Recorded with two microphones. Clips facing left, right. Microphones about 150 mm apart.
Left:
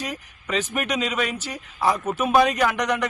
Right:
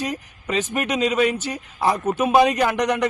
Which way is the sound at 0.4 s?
35° right (ahead or behind).